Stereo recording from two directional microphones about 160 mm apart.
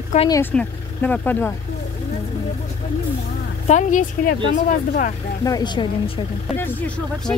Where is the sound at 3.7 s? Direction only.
50° left (ahead or behind).